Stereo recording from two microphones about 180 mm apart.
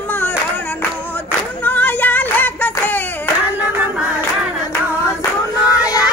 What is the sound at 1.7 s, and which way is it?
Female singing, 10° left (ahead or behind).